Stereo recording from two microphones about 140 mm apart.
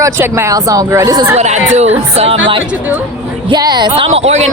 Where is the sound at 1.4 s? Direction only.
55° right (ahead or behind).